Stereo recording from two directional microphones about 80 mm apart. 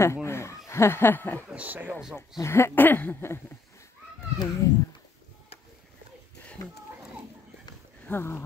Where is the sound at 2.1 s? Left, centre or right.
Left.